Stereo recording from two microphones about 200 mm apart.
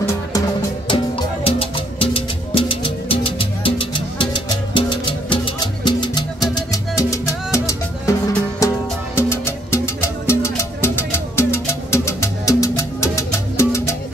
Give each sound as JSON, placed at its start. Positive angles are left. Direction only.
{"t": 0.8, "sound": "music", "side_deg": 25}